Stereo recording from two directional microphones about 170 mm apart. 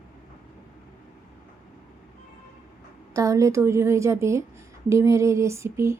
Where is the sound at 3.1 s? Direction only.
20° right (ahead or behind).